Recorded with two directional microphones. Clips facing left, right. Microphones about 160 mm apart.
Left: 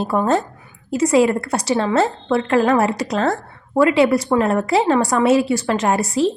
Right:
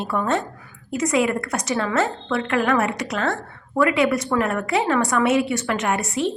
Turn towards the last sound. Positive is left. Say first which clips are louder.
# left 5 dB
turn(degrees=35)  # may be behind; listen again after turning